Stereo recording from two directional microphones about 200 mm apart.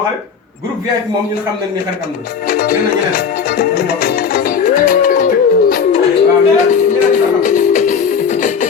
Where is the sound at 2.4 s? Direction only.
45° left (ahead or behind).